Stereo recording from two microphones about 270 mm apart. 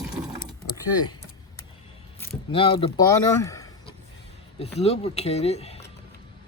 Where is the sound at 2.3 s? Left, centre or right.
Centre.